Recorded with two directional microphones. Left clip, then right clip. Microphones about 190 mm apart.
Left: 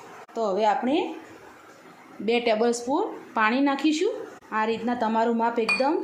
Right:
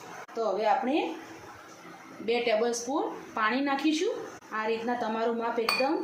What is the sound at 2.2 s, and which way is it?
Speech, 55° left (ahead or behind).